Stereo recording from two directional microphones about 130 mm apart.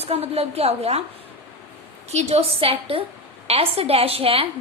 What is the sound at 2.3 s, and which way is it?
A woman's voice, 50° right (ahead or behind).